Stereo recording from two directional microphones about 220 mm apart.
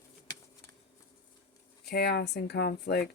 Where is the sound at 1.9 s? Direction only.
50° left (ahead or behind).